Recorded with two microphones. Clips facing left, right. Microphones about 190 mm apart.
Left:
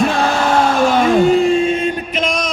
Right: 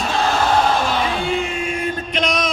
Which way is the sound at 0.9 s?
45° left (ahead or behind).